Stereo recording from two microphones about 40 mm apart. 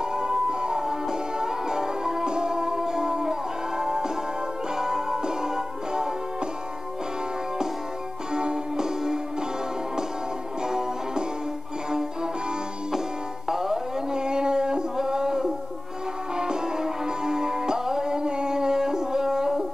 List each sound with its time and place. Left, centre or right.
0.0 s music: centre
8.3 s music: centre
10.7 s music: centre
13.5 s a sound: centre
16.3 s music: centre